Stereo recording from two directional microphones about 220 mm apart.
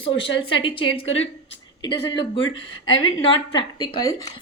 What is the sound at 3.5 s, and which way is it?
Speech, 20° left (ahead or behind).